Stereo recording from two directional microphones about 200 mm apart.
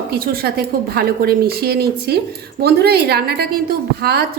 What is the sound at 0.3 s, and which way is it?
A woman's voice, 50° right (ahead or behind).